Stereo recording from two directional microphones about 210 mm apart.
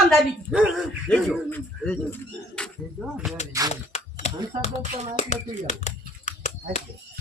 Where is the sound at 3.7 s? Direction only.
30° left (ahead or behind).